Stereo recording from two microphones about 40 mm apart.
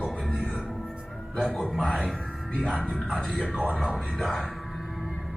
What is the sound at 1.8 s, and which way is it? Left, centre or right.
Speech, centre.